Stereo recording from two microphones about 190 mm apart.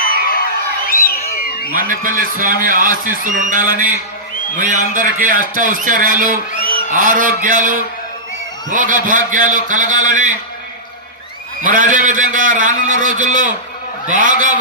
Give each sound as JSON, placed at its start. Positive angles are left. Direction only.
{"t": 0.0, "sound": "crowd", "side_deg": 50}
{"t": 1.8, "sound": "a man's voice", "side_deg": -45}
{"t": 11.6, "sound": "a man's voice", "side_deg": -45}